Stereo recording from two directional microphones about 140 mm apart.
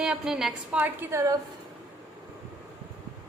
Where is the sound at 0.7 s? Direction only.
15° right (ahead or behind).